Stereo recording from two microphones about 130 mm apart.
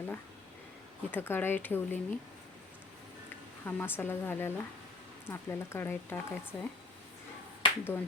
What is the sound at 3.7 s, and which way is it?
Speech, 15° left (ahead or behind).